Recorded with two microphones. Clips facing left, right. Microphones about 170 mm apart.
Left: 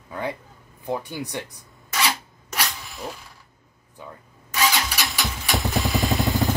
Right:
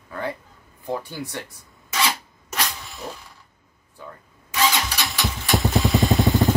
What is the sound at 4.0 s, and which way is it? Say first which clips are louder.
Wood: even; 20° left (ahead or behind).